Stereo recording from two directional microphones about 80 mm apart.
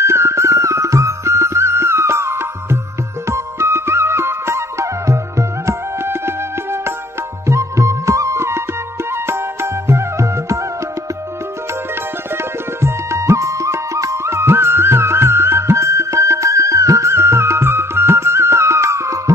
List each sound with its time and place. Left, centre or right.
0.0 s music: right
12.8 s music: right